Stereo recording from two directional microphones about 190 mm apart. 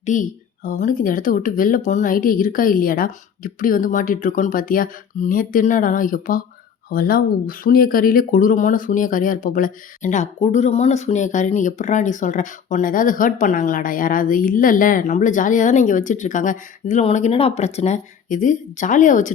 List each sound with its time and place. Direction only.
0.0 s speech: 40° left (ahead or behind)